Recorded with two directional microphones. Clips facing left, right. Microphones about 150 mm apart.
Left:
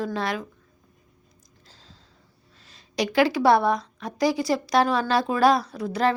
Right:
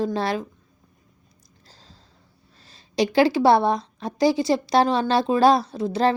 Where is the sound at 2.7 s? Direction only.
30° right (ahead or behind).